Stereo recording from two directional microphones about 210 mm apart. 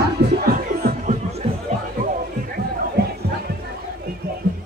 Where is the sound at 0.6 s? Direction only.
45° right (ahead or behind).